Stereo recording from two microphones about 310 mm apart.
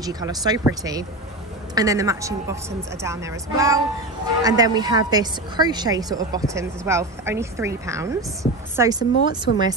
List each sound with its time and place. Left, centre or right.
0.0 s a woman's voice: centre
9.5 s speech: left